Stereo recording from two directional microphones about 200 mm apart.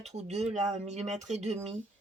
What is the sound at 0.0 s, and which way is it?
Speech, 35° right (ahead or behind).